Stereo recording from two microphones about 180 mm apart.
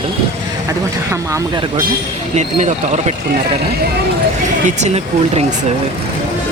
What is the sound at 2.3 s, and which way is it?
Speech, 40° right (ahead or behind).